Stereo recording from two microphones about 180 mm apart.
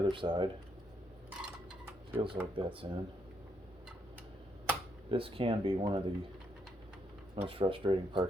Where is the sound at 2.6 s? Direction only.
25° right (ahead or behind).